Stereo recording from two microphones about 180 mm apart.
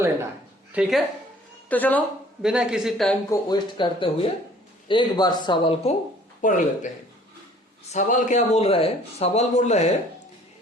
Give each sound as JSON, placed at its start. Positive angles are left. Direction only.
{"t": 0.7, "sound": "speech", "side_deg": -5}
{"t": 1.7, "sound": "speech", "side_deg": 10}
{"t": 2.4, "sound": "speech", "side_deg": -5}
{"t": 3.2, "sound": "speech", "side_deg": 25}
{"t": 6.4, "sound": "speech", "side_deg": 45}
{"t": 7.9, "sound": "a man's voice", "side_deg": 45}